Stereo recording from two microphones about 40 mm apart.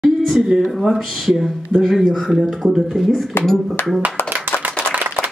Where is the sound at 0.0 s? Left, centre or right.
Centre.